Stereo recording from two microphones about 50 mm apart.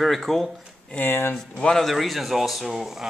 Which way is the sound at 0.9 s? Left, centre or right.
Left.